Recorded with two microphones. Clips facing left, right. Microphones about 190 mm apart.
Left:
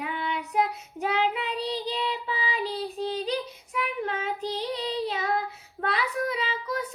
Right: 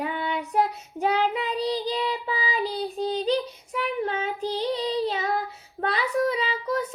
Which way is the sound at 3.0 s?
30° right (ahead or behind).